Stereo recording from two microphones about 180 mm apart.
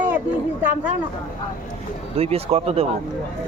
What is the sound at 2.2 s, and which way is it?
Speech, 35° right (ahead or behind).